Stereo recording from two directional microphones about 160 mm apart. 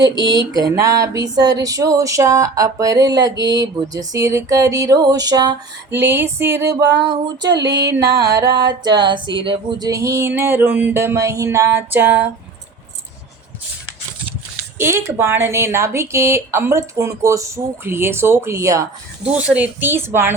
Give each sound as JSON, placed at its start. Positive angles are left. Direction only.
{"t": 0.0, "sound": "a sound", "side_deg": -25}
{"t": 6.0, "sound": "speech", "side_deg": -15}
{"t": 7.4, "sound": "music", "side_deg": -90}
{"t": 7.7, "sound": "a sound", "side_deg": -20}
{"t": 14.8, "sound": "speech", "side_deg": -15}
{"t": 19.2, "sound": "speech", "side_deg": -5}